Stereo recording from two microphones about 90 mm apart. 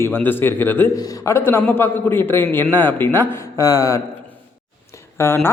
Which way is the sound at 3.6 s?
35° left (ahead or behind).